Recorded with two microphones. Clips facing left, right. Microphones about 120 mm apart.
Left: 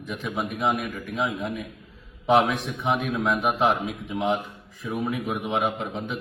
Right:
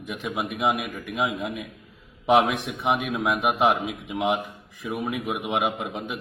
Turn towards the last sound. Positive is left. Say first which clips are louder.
# left 1 dB
turn(degrees=-10)  # may be behind; listen again after turning